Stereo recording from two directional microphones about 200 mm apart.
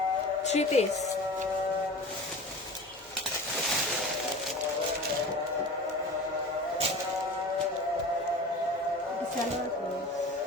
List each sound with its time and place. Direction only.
0.4 s a woman's voice: 35° left (ahead or behind)